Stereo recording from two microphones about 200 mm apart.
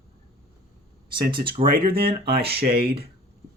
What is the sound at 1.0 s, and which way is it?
Speech, 25° right (ahead or behind).